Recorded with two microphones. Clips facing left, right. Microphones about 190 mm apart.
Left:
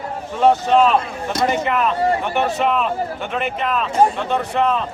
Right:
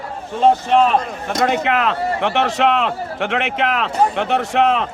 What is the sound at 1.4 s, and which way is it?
A man's voice, 70° right (ahead or behind).